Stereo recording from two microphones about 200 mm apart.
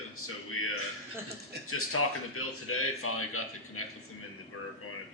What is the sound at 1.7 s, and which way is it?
A man's voice, 90° left.